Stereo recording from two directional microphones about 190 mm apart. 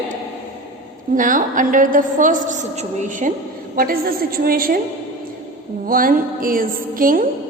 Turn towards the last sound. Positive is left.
turn(degrees=-45)  # may be behind; listen again after turning